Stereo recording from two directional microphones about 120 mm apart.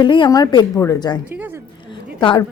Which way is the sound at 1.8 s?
40° left (ahead or behind).